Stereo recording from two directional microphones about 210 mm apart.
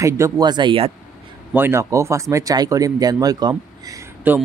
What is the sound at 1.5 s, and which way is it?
Speech, 10° right (ahead or behind).